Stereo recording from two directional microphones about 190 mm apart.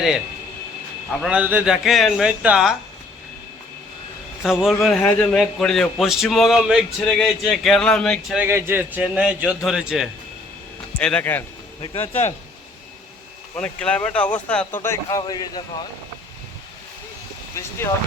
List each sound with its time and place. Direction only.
1.2 s speech: 5° right (ahead or behind)
4.4 s speech: centre (ahead or behind)
8.4 s a man's voice: 10° right (ahead or behind); by 11.4 s 10° left (ahead or behind)
11.8 s speech: 35° left (ahead or behind)
13.6 s speech: 5° left (ahead or behind); by 15.6 s 20° left (ahead or behind)